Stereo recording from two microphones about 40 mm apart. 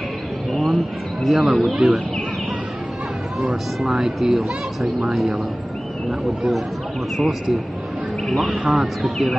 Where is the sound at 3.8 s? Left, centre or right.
Centre.